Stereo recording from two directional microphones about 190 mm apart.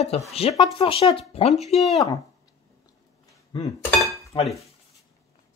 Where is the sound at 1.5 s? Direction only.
Centre (ahead or behind).